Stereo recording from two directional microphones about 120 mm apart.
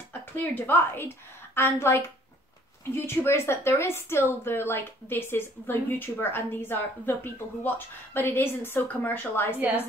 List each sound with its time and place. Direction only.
0.4 s speech: 15° left (ahead or behind)